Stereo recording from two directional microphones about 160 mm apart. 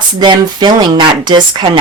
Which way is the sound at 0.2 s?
25° right (ahead or behind).